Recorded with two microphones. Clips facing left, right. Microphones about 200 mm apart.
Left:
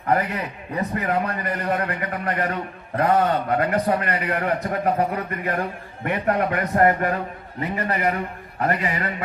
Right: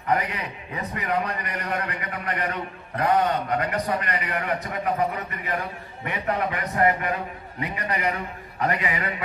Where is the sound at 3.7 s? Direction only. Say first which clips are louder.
Left 5 dB; 45° left (ahead or behind).